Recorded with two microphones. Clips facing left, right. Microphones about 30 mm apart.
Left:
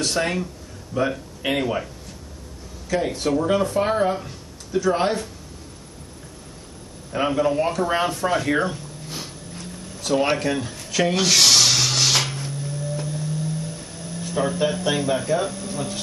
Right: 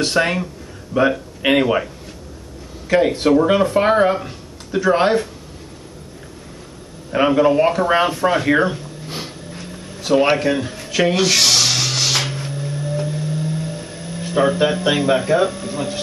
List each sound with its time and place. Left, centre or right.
0.0 s speech: right
2.9 s speech: right
7.1 s a sound: right